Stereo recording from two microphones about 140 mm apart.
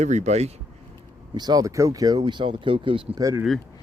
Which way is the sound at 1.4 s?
25° right (ahead or behind).